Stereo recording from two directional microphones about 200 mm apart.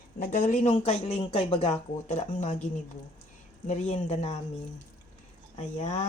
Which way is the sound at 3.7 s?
35° left (ahead or behind).